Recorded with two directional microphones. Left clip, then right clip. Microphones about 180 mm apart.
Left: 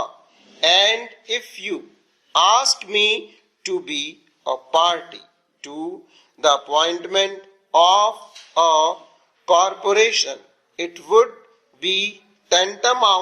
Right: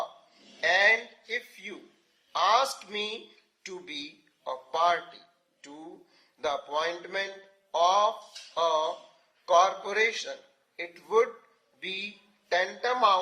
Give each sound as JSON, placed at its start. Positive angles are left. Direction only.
{"t": 0.6, "sound": "a sound", "side_deg": 35}
{"t": 2.3, "sound": "speech", "side_deg": 35}
{"t": 6.4, "sound": "speech", "side_deg": 35}
{"t": 12.5, "sound": "speech", "side_deg": 35}